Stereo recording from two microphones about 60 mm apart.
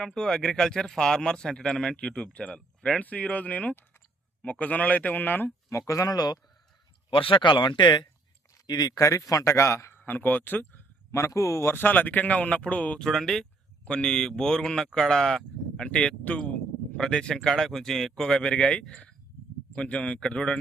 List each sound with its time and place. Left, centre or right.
0.0 s speech: centre
3.0 s speech: left
5.6 s speech: left
8.6 s speech: left
9.9 s speech: left
11.1 s speech: left
11.6 s speech: left
13.0 s speech: centre
15.9 s speech: centre